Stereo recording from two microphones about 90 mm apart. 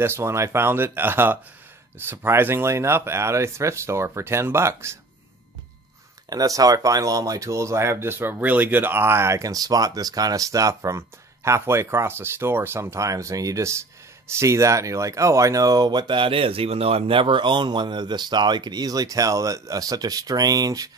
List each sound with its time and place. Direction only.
0.0 s speech: 30° right (ahead or behind)
6.3 s speech: 40° right (ahead or behind)